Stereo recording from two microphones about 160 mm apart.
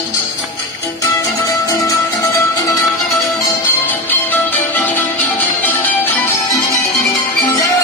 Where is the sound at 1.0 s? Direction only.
20° left (ahead or behind).